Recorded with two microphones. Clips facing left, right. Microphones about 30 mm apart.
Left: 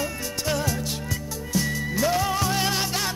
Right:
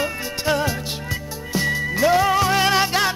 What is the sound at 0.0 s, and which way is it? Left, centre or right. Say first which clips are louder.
Music: right 5 dB; right.